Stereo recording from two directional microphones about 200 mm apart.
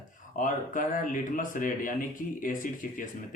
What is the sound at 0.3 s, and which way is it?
A man's voice, 40° left (ahead or behind).